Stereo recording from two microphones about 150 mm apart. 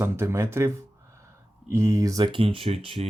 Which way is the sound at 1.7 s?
20° right (ahead or behind).